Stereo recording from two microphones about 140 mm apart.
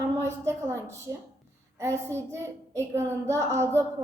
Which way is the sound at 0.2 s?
20° right (ahead or behind).